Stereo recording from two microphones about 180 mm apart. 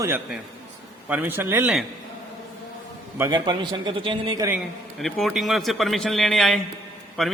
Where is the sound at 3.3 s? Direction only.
25° right (ahead or behind).